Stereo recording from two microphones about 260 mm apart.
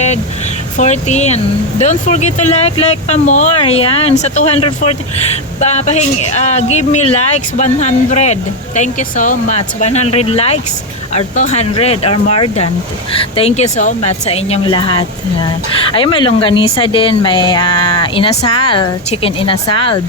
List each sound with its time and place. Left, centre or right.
0.8 s speech: left